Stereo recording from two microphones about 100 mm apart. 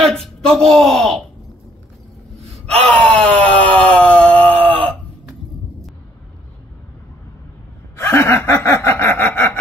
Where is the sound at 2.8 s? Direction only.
15° left (ahead or behind).